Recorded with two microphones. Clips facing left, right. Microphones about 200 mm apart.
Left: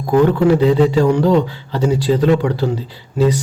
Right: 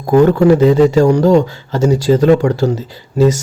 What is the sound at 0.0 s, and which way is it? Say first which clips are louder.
A man's voice: right 3 dB; 45° right (ahead or behind).